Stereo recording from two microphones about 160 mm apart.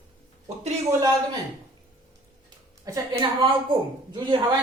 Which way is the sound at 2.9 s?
20° right (ahead or behind).